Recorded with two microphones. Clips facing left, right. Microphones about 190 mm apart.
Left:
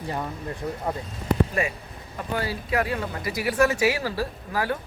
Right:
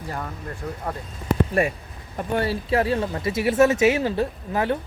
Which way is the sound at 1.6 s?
55° right (ahead or behind).